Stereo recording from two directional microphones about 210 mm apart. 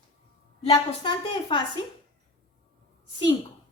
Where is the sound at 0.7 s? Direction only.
20° left (ahead or behind).